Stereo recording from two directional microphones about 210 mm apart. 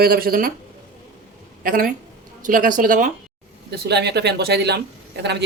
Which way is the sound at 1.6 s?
40° right (ahead or behind).